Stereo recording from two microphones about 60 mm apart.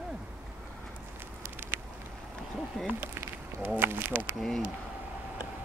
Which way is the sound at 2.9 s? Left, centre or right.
Right.